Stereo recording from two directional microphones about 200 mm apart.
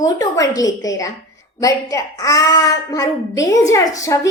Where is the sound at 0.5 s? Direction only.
15° left (ahead or behind).